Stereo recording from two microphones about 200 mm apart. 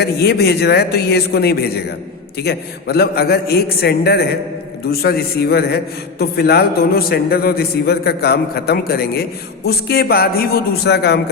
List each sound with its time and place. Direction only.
0.0 s a man's voice: 55° left (ahead or behind)